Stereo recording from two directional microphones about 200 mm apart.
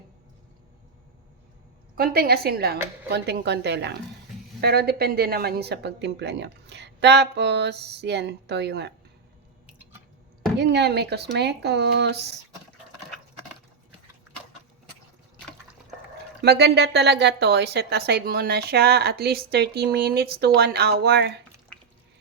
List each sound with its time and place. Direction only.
2.0 s a woman's voice: 50° right (ahead or behind)
10.6 s speech: 55° right (ahead or behind)
16.4 s a woman's voice: 55° right (ahead or behind)
21.7 s drip: 5° left (ahead or behind)